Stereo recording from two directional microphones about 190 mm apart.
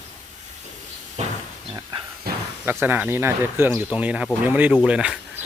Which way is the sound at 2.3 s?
55° right (ahead or behind).